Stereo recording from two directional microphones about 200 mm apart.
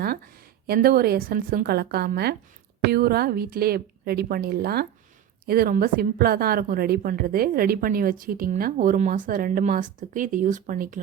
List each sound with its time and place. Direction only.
0.7 s a woman's voice: 50° right (ahead or behind)